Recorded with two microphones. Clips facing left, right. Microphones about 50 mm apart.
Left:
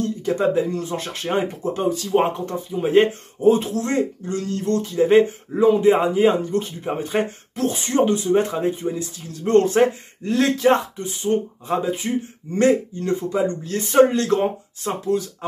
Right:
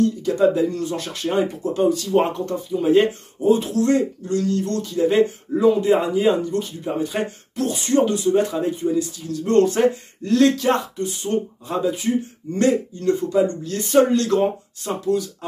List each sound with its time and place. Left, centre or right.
0.0 s speech: left
2.0 s speech: centre
2.8 s speech: left